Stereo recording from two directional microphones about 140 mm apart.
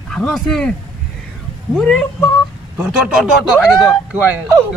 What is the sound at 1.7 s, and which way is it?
Speech, 5° left (ahead or behind).